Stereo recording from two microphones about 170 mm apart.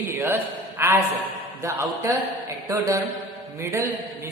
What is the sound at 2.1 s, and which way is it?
A woman's voice, 15° right (ahead or behind).